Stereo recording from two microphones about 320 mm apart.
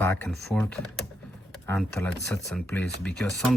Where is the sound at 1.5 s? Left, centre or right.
Centre.